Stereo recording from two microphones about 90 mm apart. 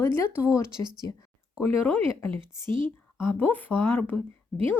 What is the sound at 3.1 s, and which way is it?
Speech, 20° left (ahead or behind).